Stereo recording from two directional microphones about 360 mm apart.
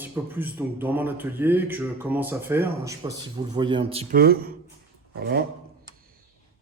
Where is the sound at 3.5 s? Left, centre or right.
Centre.